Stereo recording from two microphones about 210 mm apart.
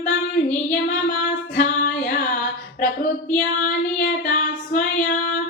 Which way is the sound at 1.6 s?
45° left (ahead or behind).